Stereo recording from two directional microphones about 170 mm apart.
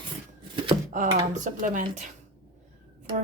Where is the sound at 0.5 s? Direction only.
30° right (ahead or behind).